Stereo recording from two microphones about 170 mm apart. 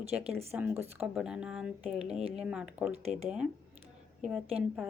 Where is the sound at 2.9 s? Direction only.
40° right (ahead or behind).